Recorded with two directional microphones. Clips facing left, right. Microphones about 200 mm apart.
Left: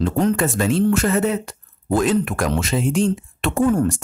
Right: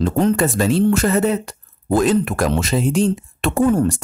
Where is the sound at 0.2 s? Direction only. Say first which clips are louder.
Right 3 dB; 30° right (ahead or behind).